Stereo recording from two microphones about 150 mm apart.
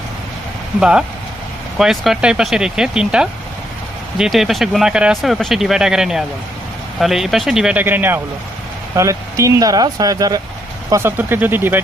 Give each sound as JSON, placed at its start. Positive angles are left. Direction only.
{"t": 0.8, "sound": "speech", "side_deg": -5}